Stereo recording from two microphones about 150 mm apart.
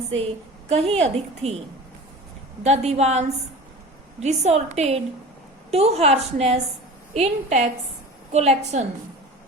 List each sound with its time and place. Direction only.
0.7 s a woman's voice: 40° right (ahead or behind)
2.6 s a woman's voice: 45° right (ahead or behind)